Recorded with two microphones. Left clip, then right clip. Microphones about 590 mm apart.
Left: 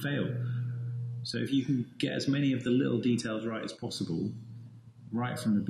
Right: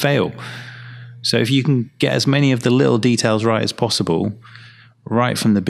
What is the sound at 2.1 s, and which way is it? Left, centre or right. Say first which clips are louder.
Speech: right 14 dB; right.